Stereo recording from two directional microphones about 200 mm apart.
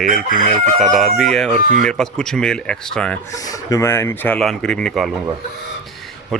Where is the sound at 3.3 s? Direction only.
15° left (ahead or behind).